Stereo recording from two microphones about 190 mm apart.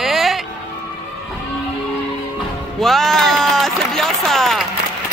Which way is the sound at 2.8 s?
Centre (ahead or behind).